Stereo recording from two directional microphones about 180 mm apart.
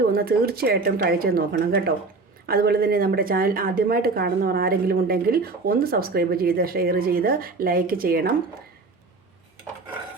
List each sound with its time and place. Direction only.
0.1 s speech: 55° right (ahead or behind)